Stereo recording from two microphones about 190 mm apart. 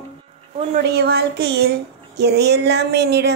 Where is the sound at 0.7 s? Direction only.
55° right (ahead or behind).